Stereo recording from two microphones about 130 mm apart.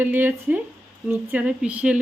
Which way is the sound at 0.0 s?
15° right (ahead or behind).